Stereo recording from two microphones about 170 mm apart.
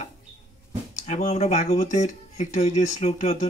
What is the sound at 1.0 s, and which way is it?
Speech, 40° left (ahead or behind).